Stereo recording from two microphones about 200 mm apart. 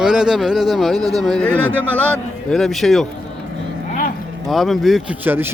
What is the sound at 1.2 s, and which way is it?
A man's voice, 5° left (ahead or behind).